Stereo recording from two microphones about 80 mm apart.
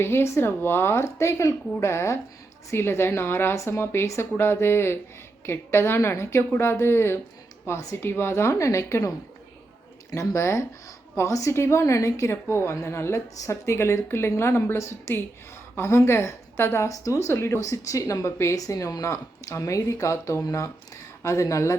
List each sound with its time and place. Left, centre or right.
0.0 s a woman's voice: left